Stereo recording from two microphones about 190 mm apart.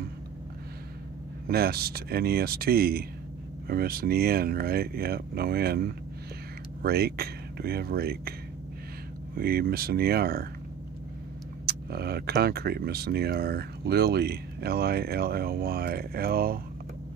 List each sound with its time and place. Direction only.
1.5 s speech: 55° right (ahead or behind)
9.4 s speech: 50° right (ahead or behind)
11.6 s speech: 55° right (ahead or behind)